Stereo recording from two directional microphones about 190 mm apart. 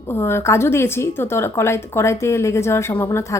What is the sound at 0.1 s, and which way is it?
A woman's voice, 10° left (ahead or behind).